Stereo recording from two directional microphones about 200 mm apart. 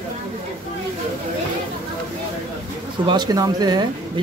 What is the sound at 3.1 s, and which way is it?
Speech, 20° right (ahead or behind).